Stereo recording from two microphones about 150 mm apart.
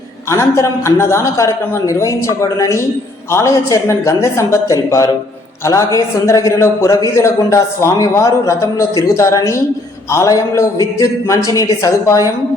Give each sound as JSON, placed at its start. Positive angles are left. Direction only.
{"t": 0.3, "sound": "a man's voice", "side_deg": 20}